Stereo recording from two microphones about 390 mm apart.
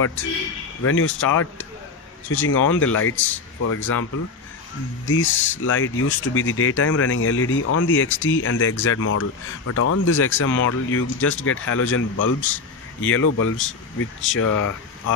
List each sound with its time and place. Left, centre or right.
0.0 s a man's voice: left
2.2 s speech: left
5.0 s speech: left
13.1 s speech: left